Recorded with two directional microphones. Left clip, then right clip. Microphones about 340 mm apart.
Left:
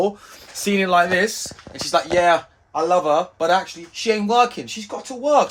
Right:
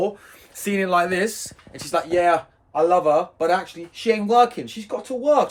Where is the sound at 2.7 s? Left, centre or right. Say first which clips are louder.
Even; centre.